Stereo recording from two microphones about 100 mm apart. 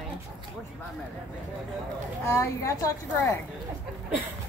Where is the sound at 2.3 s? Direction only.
30° left (ahead or behind).